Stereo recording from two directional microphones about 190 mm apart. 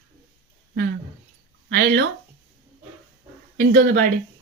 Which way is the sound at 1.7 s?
50° right (ahead or behind).